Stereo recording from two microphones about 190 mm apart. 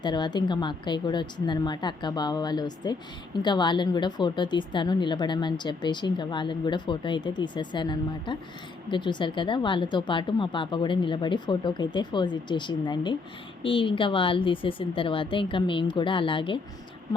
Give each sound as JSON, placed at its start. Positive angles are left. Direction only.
{"t": 0.0, "sound": "speech", "side_deg": 25}